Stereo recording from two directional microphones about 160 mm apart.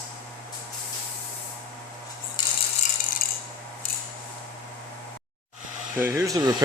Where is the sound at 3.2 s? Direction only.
65° left (ahead or behind).